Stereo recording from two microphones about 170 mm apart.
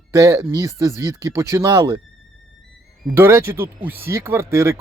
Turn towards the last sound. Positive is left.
turn(degrees=-15)  # may be behind; listen again after turning